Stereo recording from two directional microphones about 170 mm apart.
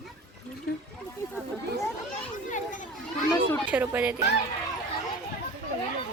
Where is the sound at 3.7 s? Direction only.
10° right (ahead or behind).